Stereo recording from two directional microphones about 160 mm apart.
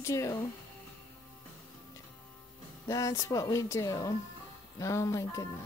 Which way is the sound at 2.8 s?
20° left (ahead or behind).